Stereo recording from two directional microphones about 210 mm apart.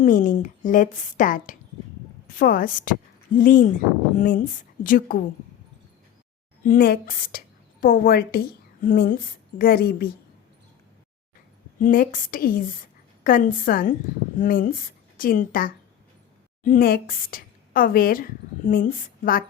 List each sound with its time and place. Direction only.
0.0 s a woman's voice: 40° left (ahead or behind)
6.7 s a woman's voice: 45° left (ahead or behind)
11.8 s a woman's voice: 40° left (ahead or behind)